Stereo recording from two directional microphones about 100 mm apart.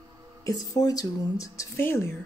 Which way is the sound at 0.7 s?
40° left (ahead or behind).